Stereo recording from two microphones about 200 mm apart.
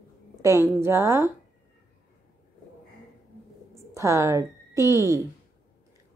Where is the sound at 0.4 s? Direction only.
15° right (ahead or behind).